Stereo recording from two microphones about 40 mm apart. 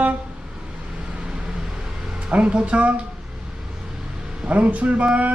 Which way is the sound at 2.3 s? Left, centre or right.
Right.